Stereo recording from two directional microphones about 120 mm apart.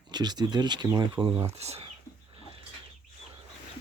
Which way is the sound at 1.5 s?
60° right (ahead or behind).